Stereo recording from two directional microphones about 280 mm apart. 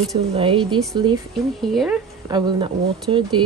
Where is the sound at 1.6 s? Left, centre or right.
Centre.